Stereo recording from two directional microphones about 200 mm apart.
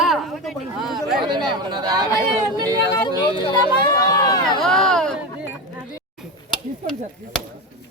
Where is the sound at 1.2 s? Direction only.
20° right (ahead or behind).